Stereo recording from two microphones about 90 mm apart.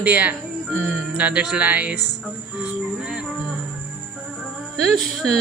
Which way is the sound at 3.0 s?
5° right (ahead or behind).